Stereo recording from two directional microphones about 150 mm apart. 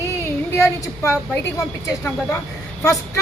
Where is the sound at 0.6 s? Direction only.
20° left (ahead or behind).